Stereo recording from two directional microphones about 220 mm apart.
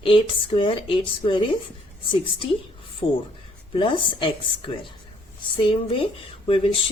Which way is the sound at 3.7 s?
20° left (ahead or behind).